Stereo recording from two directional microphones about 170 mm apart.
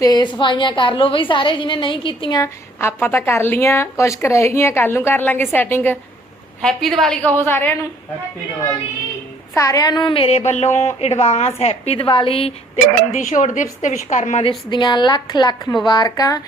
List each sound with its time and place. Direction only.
0.0 s a woman's voice: 25° left (ahead or behind)
2.4 s a woman's voice: 15° left (ahead or behind)
9.6 s speech: 20° left (ahead or behind); by 14.4 s 45° left (ahead or behind)
14.7 s a woman's voice: 25° left (ahead or behind)